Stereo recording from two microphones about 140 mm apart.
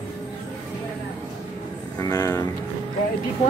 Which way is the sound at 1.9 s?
25° left (ahead or behind).